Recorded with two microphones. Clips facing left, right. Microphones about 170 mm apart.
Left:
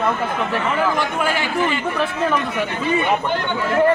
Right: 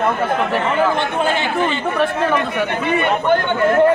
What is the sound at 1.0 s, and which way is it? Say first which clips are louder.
Speech: right 2 dB; 25° right (ahead or behind).